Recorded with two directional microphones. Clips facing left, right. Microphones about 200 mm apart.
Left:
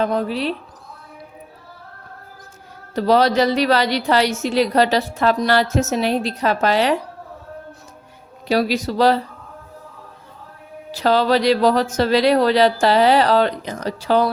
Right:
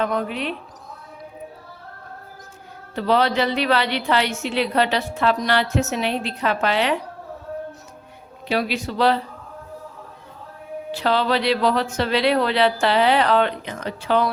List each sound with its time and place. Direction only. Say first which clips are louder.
0.0 s a woman's voice: left 3 dB; 35° left (ahead or behind)
2.9 s a woman's voice: left 4 dB; 40° left (ahead or behind)
8.4 s a woman's voice: left 5 dB; 40° left (ahead or behind)
10.9 s a woman's voice: left 4 dB; 40° left (ahead or behind)